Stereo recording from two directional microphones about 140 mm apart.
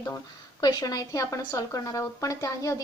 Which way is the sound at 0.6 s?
25° left (ahead or behind).